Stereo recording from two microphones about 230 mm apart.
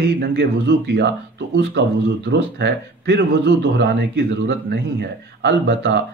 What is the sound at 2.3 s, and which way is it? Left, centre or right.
A man's voice, right.